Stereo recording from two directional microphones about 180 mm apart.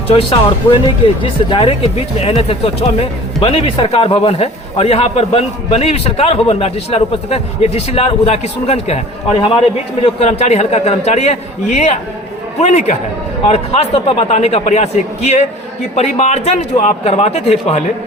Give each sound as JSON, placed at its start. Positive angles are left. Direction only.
{"t": 0.1, "sound": "speech", "side_deg": 30}